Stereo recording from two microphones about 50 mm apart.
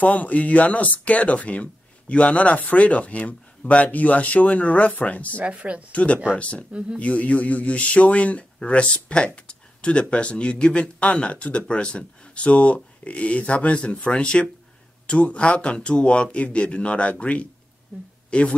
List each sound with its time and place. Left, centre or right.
0.0 s speech: left
5.4 s speech: right
5.9 s speech: left